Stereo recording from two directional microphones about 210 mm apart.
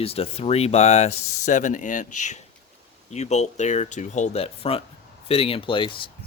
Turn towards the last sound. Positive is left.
turn(degrees=25)  # may be behind; listen again after turning